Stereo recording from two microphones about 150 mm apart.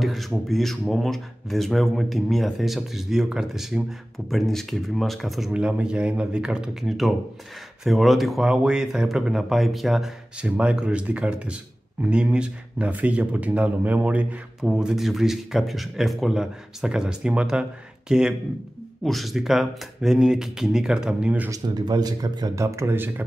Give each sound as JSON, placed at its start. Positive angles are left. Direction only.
{"t": 0.0, "sound": "speech", "side_deg": 0}
{"t": 21.5, "sound": "speech", "side_deg": -25}